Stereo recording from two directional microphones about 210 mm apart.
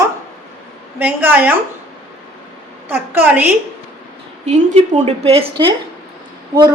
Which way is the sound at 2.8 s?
10° right (ahead or behind).